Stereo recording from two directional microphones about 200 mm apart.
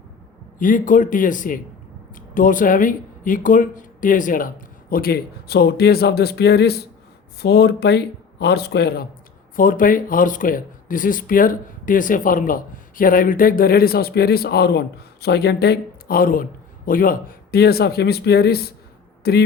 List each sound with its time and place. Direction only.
0.6 s speech: 40° left (ahead or behind)
9.6 s speech: 45° left (ahead or behind)